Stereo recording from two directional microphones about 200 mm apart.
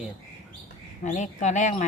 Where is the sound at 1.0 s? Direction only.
40° left (ahead or behind).